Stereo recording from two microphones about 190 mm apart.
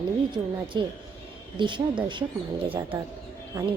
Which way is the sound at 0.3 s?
25° right (ahead or behind).